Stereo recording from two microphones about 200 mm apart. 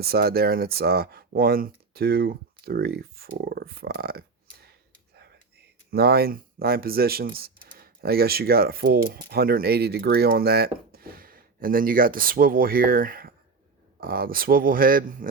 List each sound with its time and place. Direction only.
0.0 s speech: 50° right (ahead or behind)
5.9 s speech: 50° right (ahead or behind)